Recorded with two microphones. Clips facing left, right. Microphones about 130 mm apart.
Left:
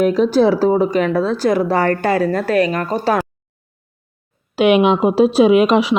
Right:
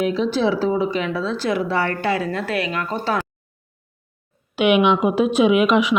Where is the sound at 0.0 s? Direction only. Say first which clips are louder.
Left 6 dB; 45° left (ahead or behind).